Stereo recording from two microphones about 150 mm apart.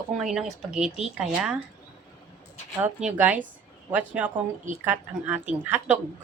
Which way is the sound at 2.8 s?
10° right (ahead or behind).